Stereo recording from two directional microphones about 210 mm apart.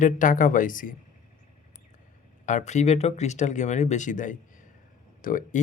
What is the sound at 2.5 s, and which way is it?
Speech, 35° left (ahead or behind).